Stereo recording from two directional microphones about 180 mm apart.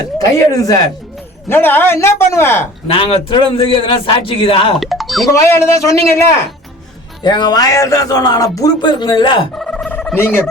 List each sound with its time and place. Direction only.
0.0 s a man's voice: 20° left (ahead or behind)
2.8 s speech: 30° left (ahead or behind)
4.8 s speech: centre (ahead or behind)
5.3 s a man's voice: 15° left (ahead or behind)
7.3 s speech: 25° left (ahead or behind)
9.6 s a sound: 5° left (ahead or behind)